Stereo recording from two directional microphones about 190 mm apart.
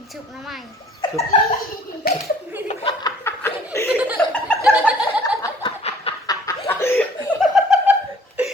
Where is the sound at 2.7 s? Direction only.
35° left (ahead or behind).